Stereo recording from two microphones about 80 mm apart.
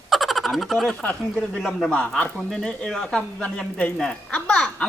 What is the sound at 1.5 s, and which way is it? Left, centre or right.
Speech, centre.